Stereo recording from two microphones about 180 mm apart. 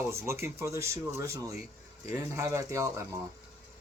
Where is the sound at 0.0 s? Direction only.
15° right (ahead or behind).